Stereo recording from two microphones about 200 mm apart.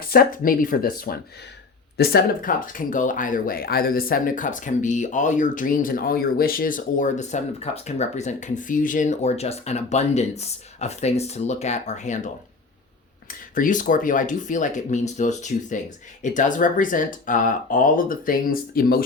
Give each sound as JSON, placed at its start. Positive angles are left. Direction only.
{"t": 0.0, "sound": "speech", "side_deg": 45}